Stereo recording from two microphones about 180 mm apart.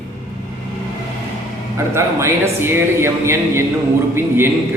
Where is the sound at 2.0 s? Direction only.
15° right (ahead or behind).